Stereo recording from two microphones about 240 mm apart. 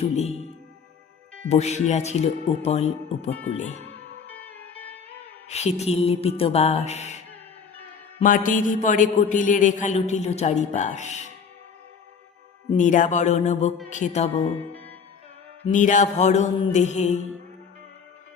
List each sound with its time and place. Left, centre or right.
0.0 s speech: left
1.5 s a man's voice: left
3.8 s music: right
4.0 s music: left
5.5 s a man's voice: left
8.2 s a man's voice: left
12.7 s a man's voice: left
15.6 s a man's voice: left